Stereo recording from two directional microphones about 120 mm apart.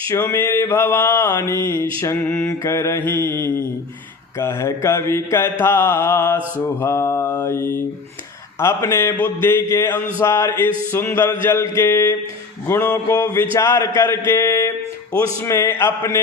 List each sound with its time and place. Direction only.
0.1 s mantra: 20° left (ahead or behind)
2.0 s music: 15° left (ahead or behind)
2.5 s mantra: 25° left (ahead or behind)